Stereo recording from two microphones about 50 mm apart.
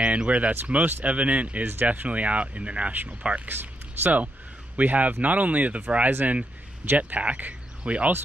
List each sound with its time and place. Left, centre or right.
0.0 s speech: right
3.4 s speech: right
6.0 s speech: right